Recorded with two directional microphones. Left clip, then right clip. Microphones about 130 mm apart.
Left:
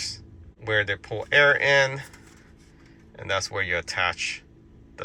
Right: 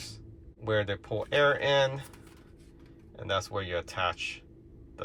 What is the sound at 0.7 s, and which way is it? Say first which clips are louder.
Speech: left 5 dB; 30° left (ahead or behind).